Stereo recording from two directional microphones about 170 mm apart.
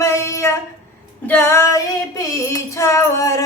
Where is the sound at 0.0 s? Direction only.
15° left (ahead or behind).